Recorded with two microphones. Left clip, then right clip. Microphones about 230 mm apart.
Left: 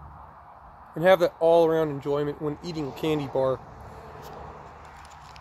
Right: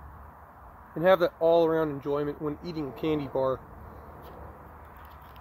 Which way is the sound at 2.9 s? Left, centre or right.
Left.